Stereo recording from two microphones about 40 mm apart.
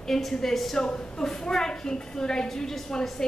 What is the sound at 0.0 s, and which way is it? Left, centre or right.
Speech, centre.